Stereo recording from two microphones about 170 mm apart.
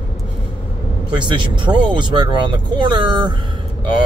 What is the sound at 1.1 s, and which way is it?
Speech, 30° right (ahead or behind).